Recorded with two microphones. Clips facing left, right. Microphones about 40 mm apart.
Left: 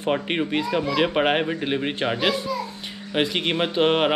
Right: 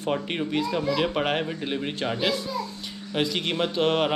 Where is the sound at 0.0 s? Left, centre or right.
Left.